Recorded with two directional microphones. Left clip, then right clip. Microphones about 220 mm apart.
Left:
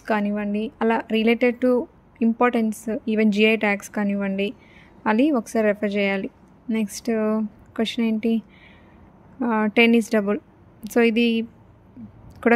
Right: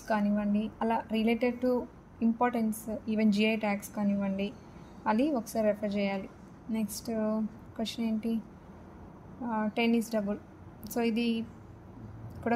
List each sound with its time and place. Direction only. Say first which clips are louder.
0.0 s speech: left 7 dB; 35° left (ahead or behind)
9.4 s speech: left 12 dB; 35° left (ahead or behind)